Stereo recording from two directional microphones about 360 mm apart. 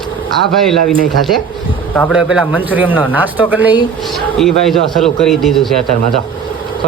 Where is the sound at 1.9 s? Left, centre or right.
Centre.